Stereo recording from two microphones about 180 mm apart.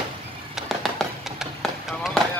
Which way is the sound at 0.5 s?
Centre (ahead or behind).